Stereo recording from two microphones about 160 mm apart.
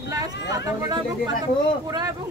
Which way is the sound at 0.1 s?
25° right (ahead or behind).